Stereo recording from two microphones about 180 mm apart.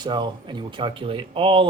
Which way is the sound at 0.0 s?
25° right (ahead or behind).